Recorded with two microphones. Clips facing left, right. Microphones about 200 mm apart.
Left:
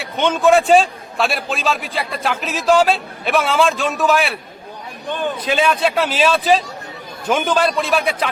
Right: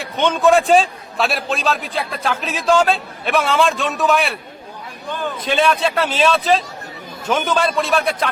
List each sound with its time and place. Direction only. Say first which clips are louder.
0.0 s a man's voice: even; centre (ahead or behind)
5.0 s a man's voice: left 2 dB; 15° left (ahead or behind)